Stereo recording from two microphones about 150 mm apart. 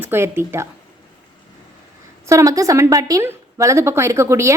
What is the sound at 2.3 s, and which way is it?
A woman's voice, 20° right (ahead or behind).